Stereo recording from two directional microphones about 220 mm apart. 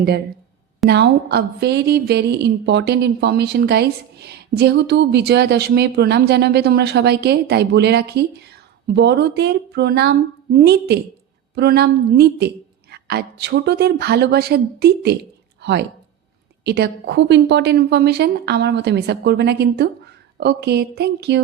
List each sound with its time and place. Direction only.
0.9 s speech: 50° right (ahead or behind)